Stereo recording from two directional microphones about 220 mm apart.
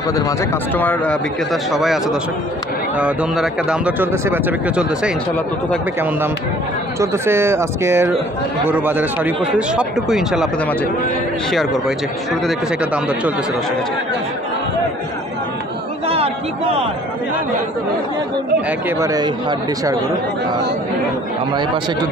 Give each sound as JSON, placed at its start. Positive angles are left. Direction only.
{"t": 0.7, "sound": "speech", "side_deg": 5}
{"t": 7.0, "sound": "speech", "side_deg": -10}
{"t": 12.3, "sound": "speech", "side_deg": -5}
{"t": 16.1, "sound": "a sound", "side_deg": -25}
{"t": 18.7, "sound": "speech", "side_deg": -10}